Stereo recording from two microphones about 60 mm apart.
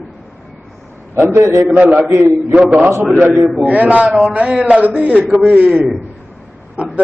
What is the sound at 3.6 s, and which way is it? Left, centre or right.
A man's voice, right.